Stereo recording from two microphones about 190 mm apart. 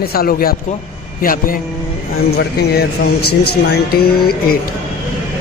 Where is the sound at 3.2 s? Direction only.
55° left (ahead or behind).